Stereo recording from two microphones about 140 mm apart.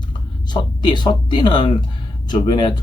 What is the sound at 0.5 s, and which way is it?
Speech, 30° left (ahead or behind).